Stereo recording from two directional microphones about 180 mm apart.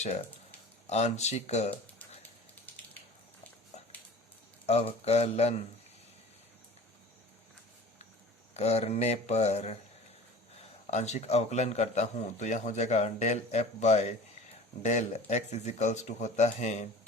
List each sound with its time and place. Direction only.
0.9 s a man's voice: 40° left (ahead or behind)
4.6 s a man's voice: 35° left (ahead or behind)
8.5 s a man's voice: 35° left (ahead or behind)
10.9 s a man's voice: 40° left (ahead or behind)